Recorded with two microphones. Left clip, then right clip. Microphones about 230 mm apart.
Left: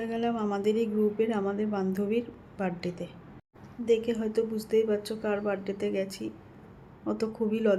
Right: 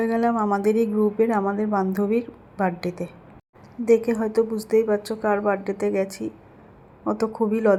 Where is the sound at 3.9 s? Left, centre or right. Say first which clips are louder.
Right 7 dB; centre.